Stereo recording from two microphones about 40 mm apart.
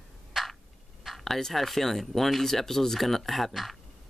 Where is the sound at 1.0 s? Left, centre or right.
Centre.